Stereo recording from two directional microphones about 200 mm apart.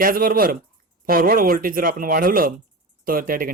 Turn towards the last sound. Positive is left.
turn(degrees=-45)  # may be behind; listen again after turning